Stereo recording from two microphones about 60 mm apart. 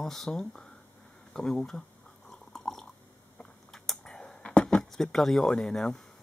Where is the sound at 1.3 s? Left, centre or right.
Centre.